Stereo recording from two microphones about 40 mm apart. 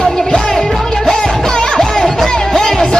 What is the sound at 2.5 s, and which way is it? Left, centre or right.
Music, centre.